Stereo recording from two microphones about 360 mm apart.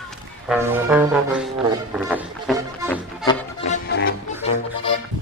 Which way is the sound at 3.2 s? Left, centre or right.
Centre.